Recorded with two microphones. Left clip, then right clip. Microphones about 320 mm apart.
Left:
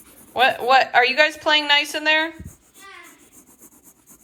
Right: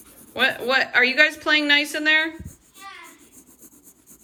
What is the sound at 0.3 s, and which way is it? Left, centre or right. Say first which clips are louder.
A woman's voice: left 4 dB; centre.